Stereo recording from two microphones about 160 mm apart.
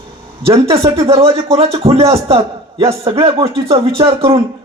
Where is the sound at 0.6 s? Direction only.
35° right (ahead or behind).